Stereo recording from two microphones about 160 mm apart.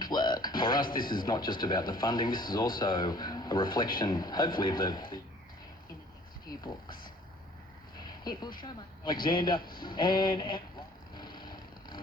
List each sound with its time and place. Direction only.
0.0 s music: 25° left (ahead or behind)
0.9 s speech: 30° left (ahead or behind)
6.5 s speech: 25° left (ahead or behind)
8.2 s speech: 25° left (ahead or behind)
9.8 s a sound: 30° left (ahead or behind)